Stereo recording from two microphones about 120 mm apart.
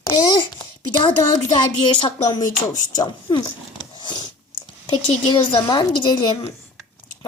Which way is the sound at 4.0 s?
40° left (ahead or behind).